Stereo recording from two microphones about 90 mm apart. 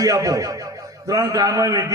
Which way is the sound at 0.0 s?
40° right (ahead or behind).